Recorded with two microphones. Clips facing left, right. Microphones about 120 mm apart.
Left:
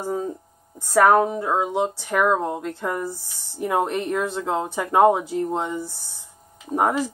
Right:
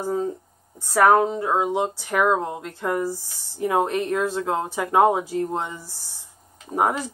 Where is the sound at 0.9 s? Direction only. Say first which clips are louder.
Left 1 dB; centre (ahead or behind).